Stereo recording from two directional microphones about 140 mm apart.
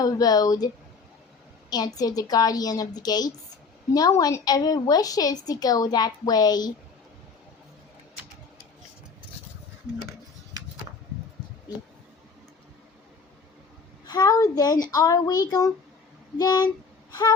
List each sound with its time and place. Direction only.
0.0 s a woman's voice: 25° left (ahead or behind)
1.7 s a woman's voice: 30° left (ahead or behind)
14.1 s a woman's voice: 30° left (ahead or behind)
17.1 s a sound: 30° left (ahead or behind)